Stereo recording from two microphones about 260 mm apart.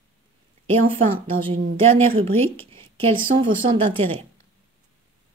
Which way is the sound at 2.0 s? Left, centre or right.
Right.